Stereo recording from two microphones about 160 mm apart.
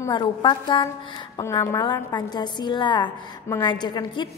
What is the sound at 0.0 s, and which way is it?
A woman's voice, 25° left (ahead or behind).